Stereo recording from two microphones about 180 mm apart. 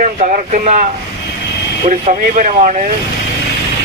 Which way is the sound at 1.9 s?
45° right (ahead or behind).